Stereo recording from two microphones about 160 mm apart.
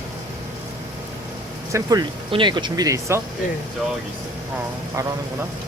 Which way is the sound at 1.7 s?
25° right (ahead or behind).